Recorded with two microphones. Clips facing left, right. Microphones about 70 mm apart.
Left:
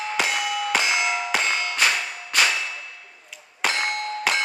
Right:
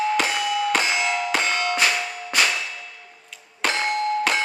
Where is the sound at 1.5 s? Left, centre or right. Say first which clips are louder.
Right 4 dB; right.